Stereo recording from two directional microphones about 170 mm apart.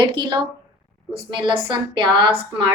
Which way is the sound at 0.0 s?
25° right (ahead or behind).